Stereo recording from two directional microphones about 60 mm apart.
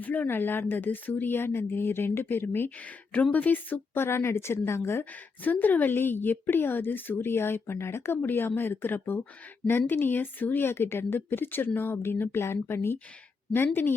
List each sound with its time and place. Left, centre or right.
0.0 s a woman's voice: left
3.1 s a woman's voice: left
5.4 s a woman's voice: left